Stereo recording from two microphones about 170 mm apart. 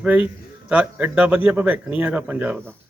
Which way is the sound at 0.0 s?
10° right (ahead or behind).